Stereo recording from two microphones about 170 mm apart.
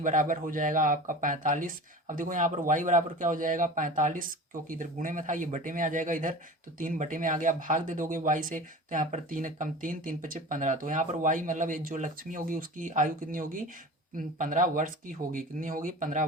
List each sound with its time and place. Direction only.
0.0 s speech: 50° right (ahead or behind)